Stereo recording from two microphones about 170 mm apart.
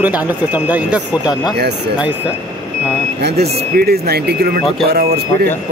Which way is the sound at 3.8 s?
65° right (ahead or behind).